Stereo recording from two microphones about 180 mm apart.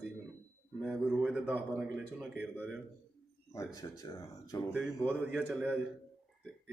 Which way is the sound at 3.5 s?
15° left (ahead or behind).